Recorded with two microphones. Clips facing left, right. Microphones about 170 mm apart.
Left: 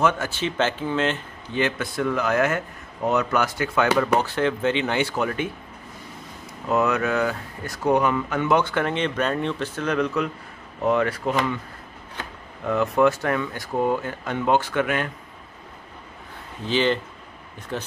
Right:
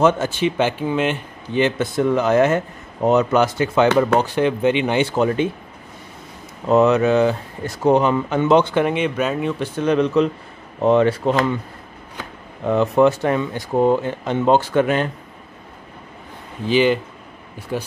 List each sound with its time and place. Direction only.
0.0 s speech: 20° right (ahead or behind)
6.7 s speech: 25° right (ahead or behind); by 9.7 s 5° right (ahead or behind)
9.8 s speech: 20° right (ahead or behind)
12.6 s speech: 25° right (ahead or behind)
16.6 s speech: 10° right (ahead or behind)